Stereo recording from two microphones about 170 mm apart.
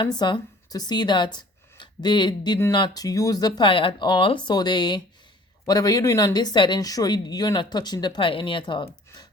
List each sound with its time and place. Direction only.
0.2 s a woman's voice: 25° left (ahead or behind)
1.4 s a sound: 25° left (ahead or behind)
2.7 s a woman's voice: 25° left (ahead or behind)